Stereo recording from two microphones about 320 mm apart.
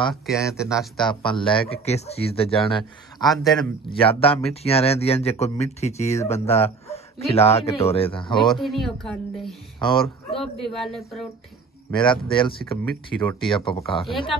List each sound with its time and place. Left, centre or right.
0.1 s speech: centre
1.0 s speech: centre
3.3 s speech: centre
4.0 s speech: centre
8.5 s speech: centre
9.8 s speech: centre
10.3 s speech: centre
12.0 s speech: centre
12.8 s speech: centre
13.7 s speech: centre
13.9 s speech: centre